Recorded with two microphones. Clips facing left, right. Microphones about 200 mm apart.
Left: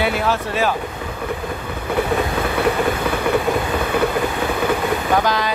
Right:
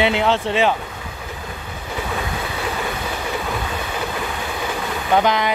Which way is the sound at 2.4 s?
60° left (ahead or behind).